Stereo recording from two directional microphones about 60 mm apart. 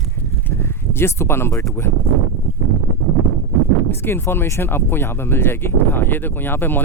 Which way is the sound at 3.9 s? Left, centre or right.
Left.